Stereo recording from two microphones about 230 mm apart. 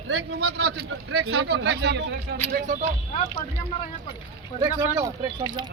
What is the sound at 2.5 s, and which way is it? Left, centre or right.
Speech, right.